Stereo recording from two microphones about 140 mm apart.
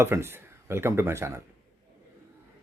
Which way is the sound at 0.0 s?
15° right (ahead or behind).